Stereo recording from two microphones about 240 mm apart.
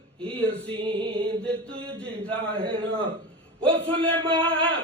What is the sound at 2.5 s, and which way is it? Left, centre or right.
Speech, right.